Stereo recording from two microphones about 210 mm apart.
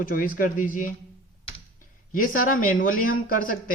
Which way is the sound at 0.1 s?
40° left (ahead or behind).